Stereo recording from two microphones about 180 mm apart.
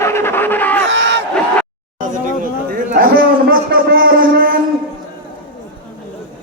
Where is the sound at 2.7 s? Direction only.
50° right (ahead or behind).